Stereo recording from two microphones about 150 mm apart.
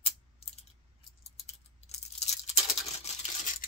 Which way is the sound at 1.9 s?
45° left (ahead or behind).